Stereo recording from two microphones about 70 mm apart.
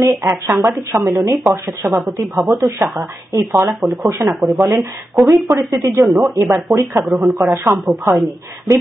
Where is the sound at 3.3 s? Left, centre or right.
Right.